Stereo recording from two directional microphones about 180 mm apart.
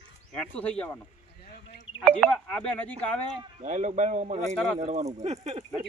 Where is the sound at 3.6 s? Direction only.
40° right (ahead or behind).